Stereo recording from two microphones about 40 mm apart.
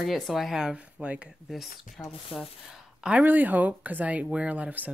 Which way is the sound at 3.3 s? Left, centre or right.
Right.